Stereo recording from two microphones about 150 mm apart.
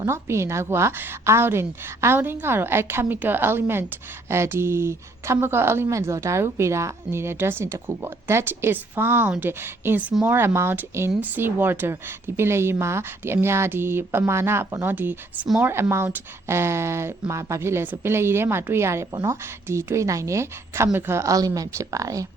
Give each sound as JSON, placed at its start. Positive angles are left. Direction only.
{"t": 0.0, "sound": "speech", "side_deg": -15}